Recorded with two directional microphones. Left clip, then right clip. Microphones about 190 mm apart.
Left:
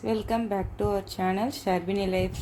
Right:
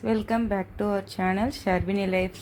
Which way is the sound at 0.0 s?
10° right (ahead or behind).